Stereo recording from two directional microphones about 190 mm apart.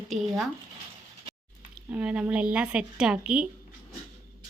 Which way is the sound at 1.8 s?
5° right (ahead or behind).